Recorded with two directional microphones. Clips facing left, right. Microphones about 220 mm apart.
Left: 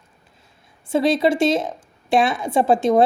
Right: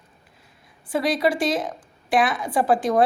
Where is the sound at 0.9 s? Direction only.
25° left (ahead or behind).